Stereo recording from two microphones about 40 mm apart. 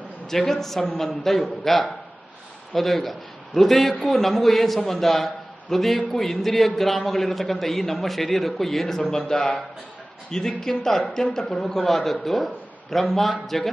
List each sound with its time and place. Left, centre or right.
0.3 s a man's voice: centre